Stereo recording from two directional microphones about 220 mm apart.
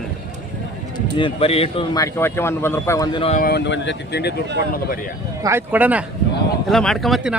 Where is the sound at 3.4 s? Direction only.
45° left (ahead or behind).